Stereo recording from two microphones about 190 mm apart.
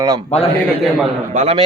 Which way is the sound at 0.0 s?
20° right (ahead or behind).